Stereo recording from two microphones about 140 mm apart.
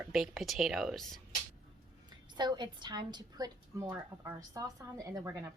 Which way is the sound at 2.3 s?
30° right (ahead or behind).